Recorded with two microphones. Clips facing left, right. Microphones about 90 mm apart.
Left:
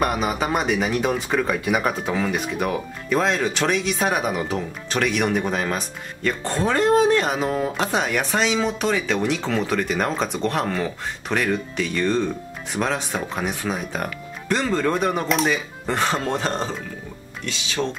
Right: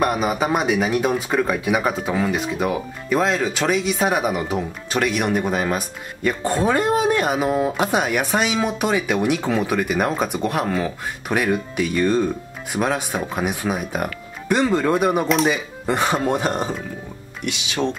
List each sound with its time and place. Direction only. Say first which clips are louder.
0.0 s speech: right 2 dB; 5° right (ahead or behind)
15.2 s speech: right 3 dB; centre (ahead or behind)
15.5 s speech: right 2 dB; 10° right (ahead or behind)